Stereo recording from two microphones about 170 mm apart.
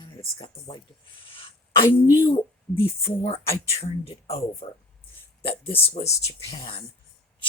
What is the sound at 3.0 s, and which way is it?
Speech, 35° left (ahead or behind).